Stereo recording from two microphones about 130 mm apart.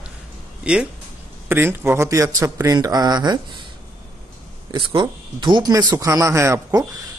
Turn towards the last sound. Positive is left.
turn(degrees=-25)  # may be behind; listen again after turning